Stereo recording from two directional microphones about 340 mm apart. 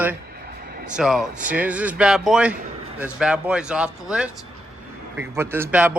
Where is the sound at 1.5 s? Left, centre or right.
Centre.